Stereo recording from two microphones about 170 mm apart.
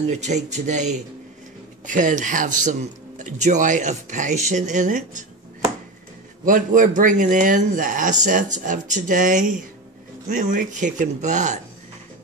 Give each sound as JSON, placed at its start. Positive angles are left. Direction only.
{"t": 0.1, "sound": "speech", "side_deg": -45}
{"t": 6.4, "sound": "speech", "side_deg": -50}